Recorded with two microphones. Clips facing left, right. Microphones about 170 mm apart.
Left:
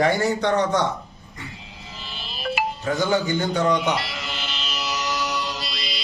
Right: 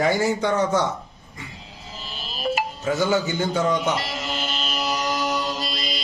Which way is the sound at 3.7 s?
45° right (ahead or behind).